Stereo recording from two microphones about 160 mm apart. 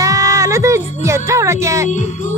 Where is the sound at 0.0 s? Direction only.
20° right (ahead or behind).